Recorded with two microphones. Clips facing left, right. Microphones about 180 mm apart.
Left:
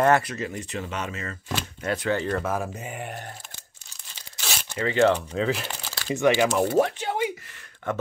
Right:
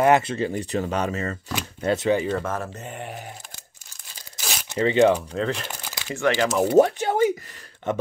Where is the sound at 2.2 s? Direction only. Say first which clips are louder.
Right 1 dB; centre (ahead or behind).